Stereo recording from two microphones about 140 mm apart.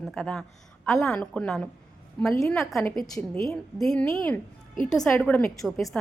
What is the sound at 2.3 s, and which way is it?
Speech, 20° left (ahead or behind).